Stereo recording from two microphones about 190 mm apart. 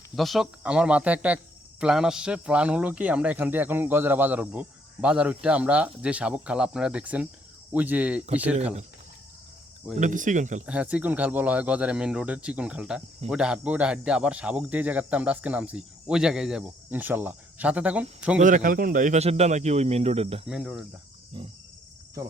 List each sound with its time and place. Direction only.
0.2 s a man's voice: centre (ahead or behind)
10.0 s speech: 40° right (ahead or behind)
10.7 s a man's voice: 5° right (ahead or behind)
18.3 s speech: 45° right (ahead or behind)
20.5 s speech: 5° right (ahead or behind)
21.4 s wild animals: 25° right (ahead or behind)